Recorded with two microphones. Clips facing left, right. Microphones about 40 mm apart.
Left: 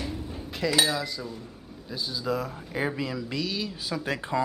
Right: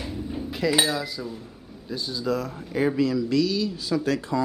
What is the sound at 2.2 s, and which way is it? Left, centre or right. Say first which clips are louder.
Speech: right 3 dB; centre.